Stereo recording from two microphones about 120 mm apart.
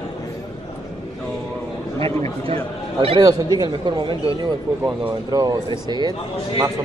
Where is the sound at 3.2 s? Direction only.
30° right (ahead or behind).